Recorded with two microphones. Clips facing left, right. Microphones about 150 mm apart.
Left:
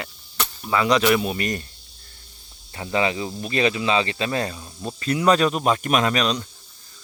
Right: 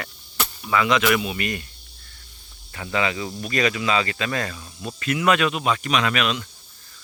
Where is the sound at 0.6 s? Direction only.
35° left (ahead or behind).